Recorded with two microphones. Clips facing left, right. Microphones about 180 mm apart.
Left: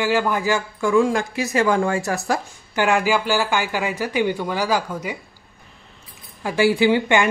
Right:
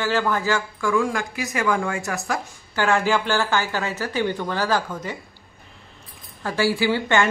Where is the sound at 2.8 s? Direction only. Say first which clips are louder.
Left 2 dB; 15° left (ahead or behind).